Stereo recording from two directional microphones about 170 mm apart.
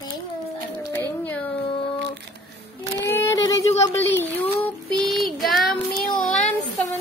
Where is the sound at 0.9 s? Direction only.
10° left (ahead or behind).